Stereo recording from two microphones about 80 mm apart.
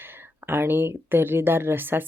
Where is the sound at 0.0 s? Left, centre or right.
Right.